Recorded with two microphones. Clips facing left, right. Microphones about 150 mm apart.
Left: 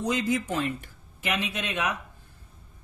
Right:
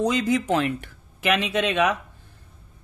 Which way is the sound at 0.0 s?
90° right.